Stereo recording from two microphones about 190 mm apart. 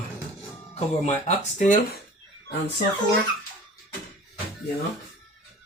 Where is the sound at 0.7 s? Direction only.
35° left (ahead or behind).